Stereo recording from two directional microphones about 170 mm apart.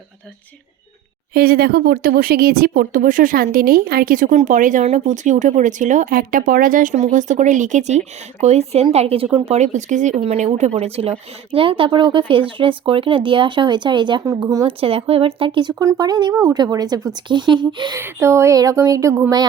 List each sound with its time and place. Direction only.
1.3 s speech: 65° right (ahead or behind); by 14.6 s 20° right (ahead or behind)
14.7 s speech: 35° right (ahead or behind)
15.7 s speech: 20° right (ahead or behind)
18.0 s speech: 15° right (ahead or behind)